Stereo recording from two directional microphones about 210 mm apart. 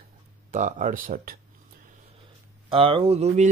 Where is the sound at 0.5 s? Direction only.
35° right (ahead or behind).